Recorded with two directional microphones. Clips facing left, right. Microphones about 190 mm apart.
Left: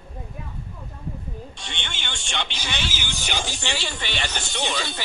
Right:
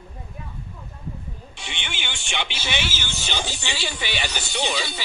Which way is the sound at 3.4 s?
5° right (ahead or behind).